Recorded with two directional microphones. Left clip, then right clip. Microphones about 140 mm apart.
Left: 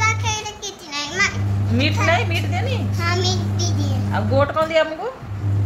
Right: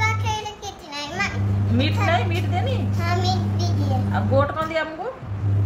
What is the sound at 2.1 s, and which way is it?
Speech, 25° left (ahead or behind).